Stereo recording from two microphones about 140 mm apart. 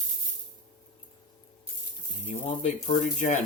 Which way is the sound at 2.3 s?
60° left (ahead or behind).